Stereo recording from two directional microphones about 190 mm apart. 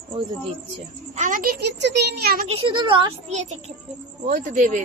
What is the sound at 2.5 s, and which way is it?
Speech, 25° right (ahead or behind).